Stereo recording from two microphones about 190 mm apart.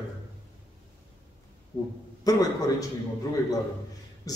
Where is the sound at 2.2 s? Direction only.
20° left (ahead or behind).